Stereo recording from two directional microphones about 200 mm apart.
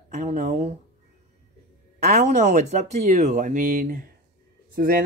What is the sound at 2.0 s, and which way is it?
Speech, 35° right (ahead or behind).